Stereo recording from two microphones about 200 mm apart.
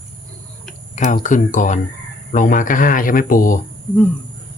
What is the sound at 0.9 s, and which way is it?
Tick-tock, 40° left (ahead or behind).